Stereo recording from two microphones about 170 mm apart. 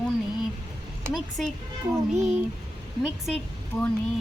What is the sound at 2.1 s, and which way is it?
Child singing, 45° right (ahead or behind).